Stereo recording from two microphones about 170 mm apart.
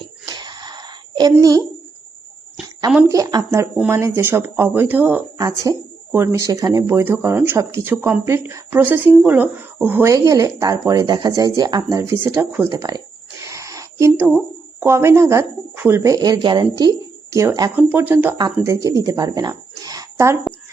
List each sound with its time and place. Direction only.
0.3 s a sound: 25° right (ahead or behind)
3.1 s speech: 20° right (ahead or behind)
5.4 s speech: 20° right (ahead or behind)
13.4 s a sound: 20° right (ahead or behind)
14.8 s speech: 15° right (ahead or behind)
18.3 s speech: 20° right (ahead or behind)